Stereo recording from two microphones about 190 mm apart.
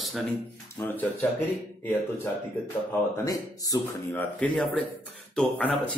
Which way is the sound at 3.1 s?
20° left (ahead or behind).